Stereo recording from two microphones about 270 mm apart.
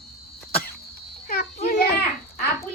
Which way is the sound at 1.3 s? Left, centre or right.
Left.